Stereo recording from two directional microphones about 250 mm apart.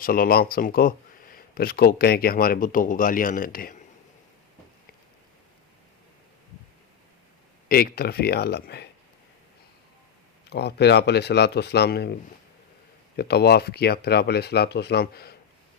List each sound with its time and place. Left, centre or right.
0.0 s speech: left
7.7 s speech: left
10.5 s speech: left
13.1 s speech: left